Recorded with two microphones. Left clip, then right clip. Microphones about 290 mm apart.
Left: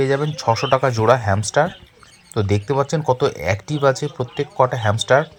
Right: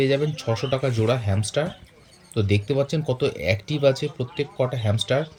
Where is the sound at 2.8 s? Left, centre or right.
Centre.